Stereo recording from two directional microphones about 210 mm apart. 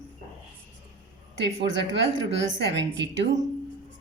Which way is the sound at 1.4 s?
55° right (ahead or behind).